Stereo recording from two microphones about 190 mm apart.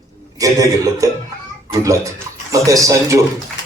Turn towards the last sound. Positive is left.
turn(degrees=-15)  # may be behind; listen again after turning